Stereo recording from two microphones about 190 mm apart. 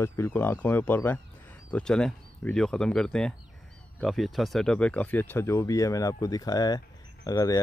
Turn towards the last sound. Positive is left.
turn(degrees=20)  # may be behind; listen again after turning